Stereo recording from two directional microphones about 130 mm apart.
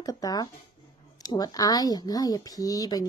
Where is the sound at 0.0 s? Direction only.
30° left (ahead or behind).